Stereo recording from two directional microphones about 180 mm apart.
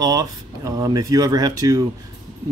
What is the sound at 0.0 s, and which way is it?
Speech, 20° right (ahead or behind).